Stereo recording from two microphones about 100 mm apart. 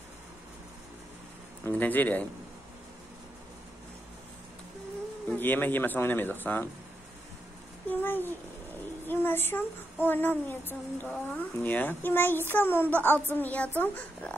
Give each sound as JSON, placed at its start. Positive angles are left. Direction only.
{"t": 1.6, "sound": "speech", "side_deg": 20}
{"t": 5.4, "sound": "a woman's voice", "side_deg": 20}
{"t": 7.9, "sound": "a woman's voice", "side_deg": 20}